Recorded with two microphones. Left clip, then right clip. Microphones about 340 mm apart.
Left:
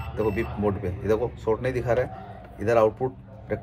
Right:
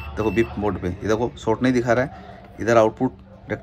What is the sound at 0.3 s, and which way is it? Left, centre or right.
Speech, right.